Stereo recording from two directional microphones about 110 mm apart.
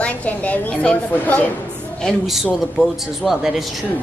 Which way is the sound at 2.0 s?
Centre (ahead or behind).